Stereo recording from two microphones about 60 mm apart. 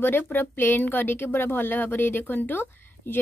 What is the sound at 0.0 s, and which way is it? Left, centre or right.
Speech, left.